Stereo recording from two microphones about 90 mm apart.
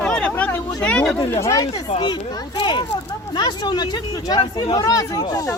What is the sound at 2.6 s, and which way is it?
Speech, 60° left (ahead or behind).